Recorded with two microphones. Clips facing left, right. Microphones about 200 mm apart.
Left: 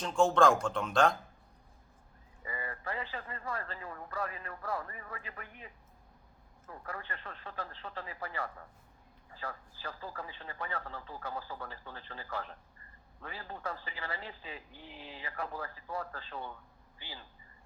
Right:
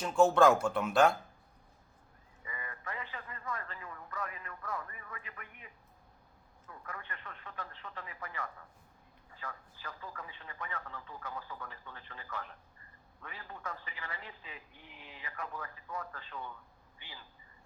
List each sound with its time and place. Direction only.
0.0 s speech: 5° right (ahead or behind)
2.4 s a sound: 35° left (ahead or behind)
6.7 s speech: 35° left (ahead or behind)